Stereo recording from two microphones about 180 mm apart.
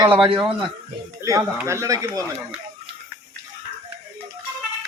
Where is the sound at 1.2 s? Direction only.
15° right (ahead or behind).